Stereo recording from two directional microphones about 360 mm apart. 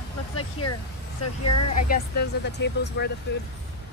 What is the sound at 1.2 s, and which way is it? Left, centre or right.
Speech, left.